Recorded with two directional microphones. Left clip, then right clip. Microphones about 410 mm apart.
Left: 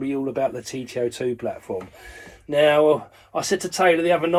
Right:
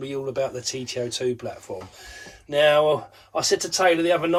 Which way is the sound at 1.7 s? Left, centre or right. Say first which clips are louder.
Left 4 dB; left.